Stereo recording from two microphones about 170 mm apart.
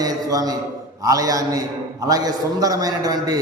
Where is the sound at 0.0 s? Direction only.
20° right (ahead or behind).